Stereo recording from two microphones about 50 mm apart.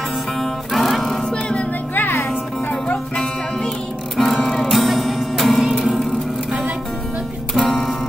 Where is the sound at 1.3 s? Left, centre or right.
Centre.